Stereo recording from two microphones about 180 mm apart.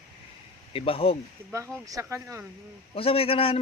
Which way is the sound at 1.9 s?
15° right (ahead or behind).